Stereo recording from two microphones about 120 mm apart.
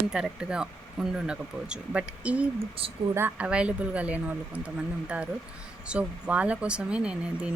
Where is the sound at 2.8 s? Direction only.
50° right (ahead or behind).